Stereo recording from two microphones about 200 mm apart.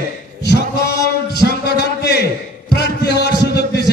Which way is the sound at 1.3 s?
55° left (ahead or behind).